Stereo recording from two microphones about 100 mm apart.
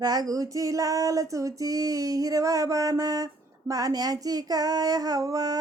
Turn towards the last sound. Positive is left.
turn(degrees=-35)  # may be behind; listen again after turning